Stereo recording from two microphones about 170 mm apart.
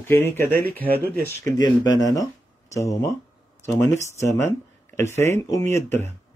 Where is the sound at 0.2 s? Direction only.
10° left (ahead or behind).